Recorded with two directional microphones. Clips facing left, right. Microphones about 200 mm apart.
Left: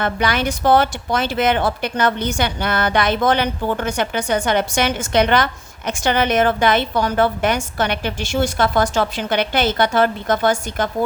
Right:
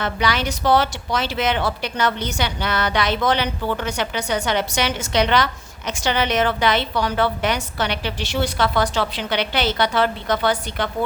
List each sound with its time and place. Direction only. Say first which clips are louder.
0.0 s speech: left 3 dB; 50° left (ahead or behind)